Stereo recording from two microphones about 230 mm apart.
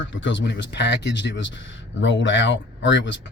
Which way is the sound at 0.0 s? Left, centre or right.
Left.